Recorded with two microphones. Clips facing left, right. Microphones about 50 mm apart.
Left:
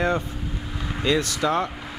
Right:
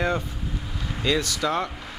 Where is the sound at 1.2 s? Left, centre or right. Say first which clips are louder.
Left 2 dB; left.